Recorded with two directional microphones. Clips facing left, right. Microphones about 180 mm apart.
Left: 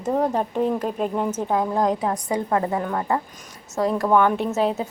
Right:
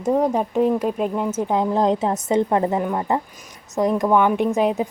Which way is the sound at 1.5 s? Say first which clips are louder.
Right 3 dB; 20° right (ahead or behind).